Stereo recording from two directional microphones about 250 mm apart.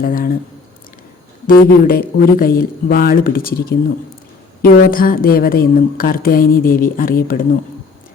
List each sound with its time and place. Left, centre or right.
0.0 s a woman's voice: left
1.5 s a woman's voice: left